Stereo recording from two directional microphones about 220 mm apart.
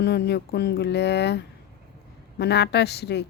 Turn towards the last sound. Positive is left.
turn(degrees=50)  # may be behind; listen again after turning